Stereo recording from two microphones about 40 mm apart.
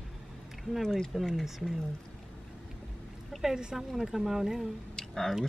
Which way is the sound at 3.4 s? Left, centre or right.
Centre.